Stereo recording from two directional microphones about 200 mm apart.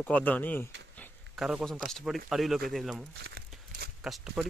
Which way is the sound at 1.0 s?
Centre (ahead or behind).